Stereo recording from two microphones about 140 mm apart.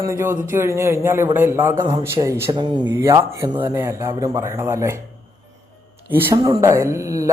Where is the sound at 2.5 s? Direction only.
30° right (ahead or behind).